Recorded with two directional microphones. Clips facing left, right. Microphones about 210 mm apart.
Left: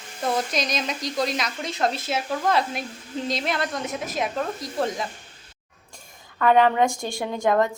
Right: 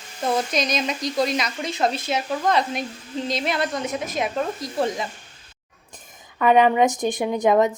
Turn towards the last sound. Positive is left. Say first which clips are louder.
# right 3 dB
turn(degrees=-15)  # may be behind; listen again after turning